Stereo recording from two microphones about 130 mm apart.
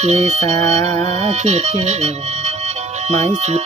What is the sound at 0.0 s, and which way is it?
Speech, 55° right (ahead or behind).